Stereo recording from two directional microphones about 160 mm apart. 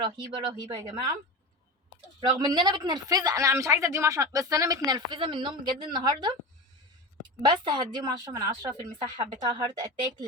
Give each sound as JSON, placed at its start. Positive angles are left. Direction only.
{"t": 0.0, "sound": "speech", "side_deg": -25}
{"t": 2.2, "sound": "speech", "side_deg": -25}
{"t": 7.4, "sound": "speech", "side_deg": -30}